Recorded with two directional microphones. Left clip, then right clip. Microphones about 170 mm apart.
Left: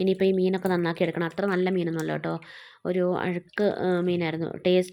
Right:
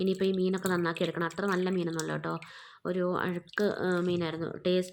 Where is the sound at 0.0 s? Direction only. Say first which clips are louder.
Left 6 dB; 20° left (ahead or behind).